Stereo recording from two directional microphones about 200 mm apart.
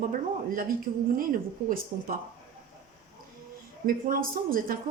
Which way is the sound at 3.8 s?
45° right (ahead or behind).